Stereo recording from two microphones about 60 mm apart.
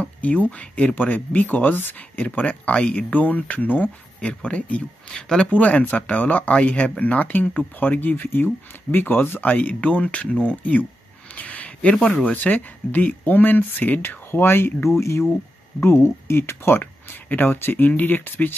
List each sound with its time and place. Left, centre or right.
0.0 s speech: left
4.2 s speech: left
5.1 s speech: centre
5.5 s speech: left
9.5 s speech: left
11.3 s a sound: left
12.3 s speech: left
14.9 s speech: left
16.8 s speech: left